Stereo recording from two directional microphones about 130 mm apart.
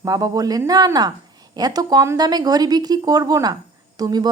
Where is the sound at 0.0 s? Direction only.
30° right (ahead or behind).